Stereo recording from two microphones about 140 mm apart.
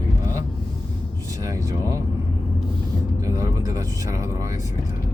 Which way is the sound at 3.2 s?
25° right (ahead or behind).